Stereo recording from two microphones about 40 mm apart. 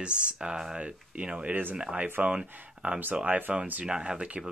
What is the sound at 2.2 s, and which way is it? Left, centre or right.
Speech, right.